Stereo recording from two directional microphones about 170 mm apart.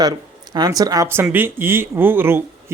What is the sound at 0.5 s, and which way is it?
Speech, 25° right (ahead or behind).